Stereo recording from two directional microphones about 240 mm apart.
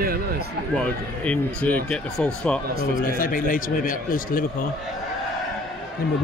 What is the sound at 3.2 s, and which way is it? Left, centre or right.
Speech, left.